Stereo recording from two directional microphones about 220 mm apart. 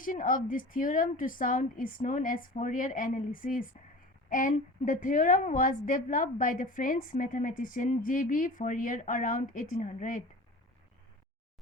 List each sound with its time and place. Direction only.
0.0 s a woman's voice: 35° left (ahead or behind)